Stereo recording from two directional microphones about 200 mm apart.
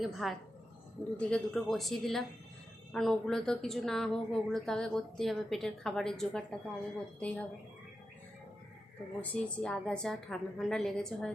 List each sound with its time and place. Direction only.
0.0 s a woman's voice: centre (ahead or behind)
9.3 s speech: 5° left (ahead or behind)